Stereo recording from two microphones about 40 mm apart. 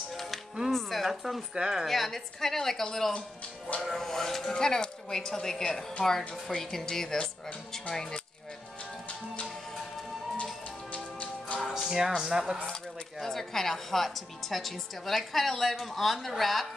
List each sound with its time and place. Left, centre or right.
0.1 s music: centre
0.7 s a woman's voice: centre
1.5 s speech: centre
1.9 s speech: centre
4.6 s speech: centre
6.0 s speech: centre
10.3 s music: left
11.6 s music: centre
12.2 s speech: centre
13.2 s a woman's voice: centre